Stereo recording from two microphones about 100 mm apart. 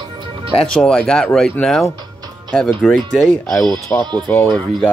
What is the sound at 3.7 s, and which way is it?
Speech, 30° left (ahead or behind).